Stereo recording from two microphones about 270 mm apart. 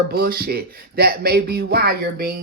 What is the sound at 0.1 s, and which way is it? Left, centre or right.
Speech, right.